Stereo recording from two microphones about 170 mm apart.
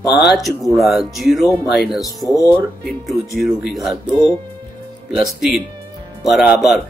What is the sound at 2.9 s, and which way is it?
Speech, centre (ahead or behind).